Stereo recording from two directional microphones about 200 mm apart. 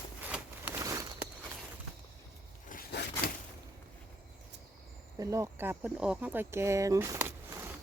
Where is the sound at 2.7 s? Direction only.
50° left (ahead or behind).